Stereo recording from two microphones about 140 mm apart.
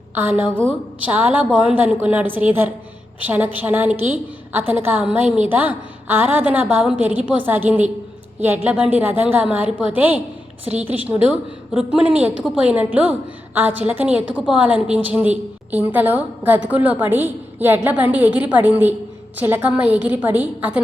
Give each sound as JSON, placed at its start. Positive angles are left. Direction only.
{"t": 0.1, "sound": "a woman's voice", "side_deg": -10}